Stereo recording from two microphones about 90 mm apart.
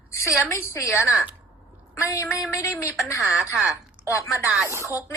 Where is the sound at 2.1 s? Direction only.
35° left (ahead or behind).